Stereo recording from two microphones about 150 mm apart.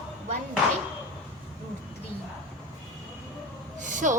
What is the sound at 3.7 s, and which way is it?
Speech, 55° right (ahead or behind).